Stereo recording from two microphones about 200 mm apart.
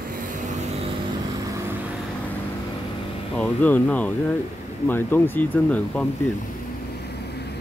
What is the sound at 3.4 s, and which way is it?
Speech, 10° left (ahead or behind).